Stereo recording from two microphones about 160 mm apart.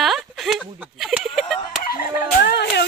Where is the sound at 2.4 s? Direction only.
90° left.